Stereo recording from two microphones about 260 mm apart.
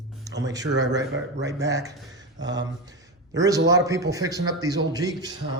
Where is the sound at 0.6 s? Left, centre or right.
Right.